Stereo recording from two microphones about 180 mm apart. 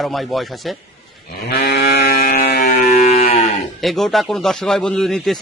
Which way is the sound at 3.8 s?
Centre (ahead or behind).